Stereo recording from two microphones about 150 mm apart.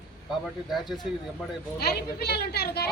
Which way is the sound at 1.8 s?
90° left.